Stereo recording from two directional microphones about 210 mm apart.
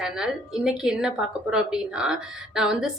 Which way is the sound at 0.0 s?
5° right (ahead or behind).